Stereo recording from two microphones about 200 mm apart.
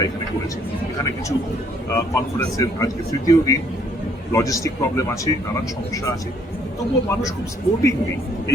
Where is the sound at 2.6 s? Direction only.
15° left (ahead or behind).